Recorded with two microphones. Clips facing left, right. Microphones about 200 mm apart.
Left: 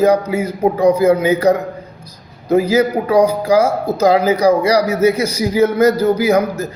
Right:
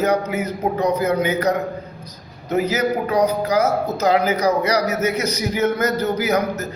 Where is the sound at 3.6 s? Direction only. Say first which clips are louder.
Left 4 dB; 10° left (ahead or behind).